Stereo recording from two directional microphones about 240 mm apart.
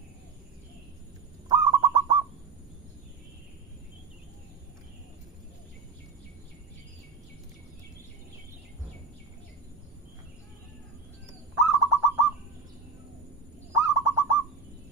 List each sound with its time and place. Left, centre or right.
1.5 s bird: centre
11.5 s bird: centre
13.7 s bird: centre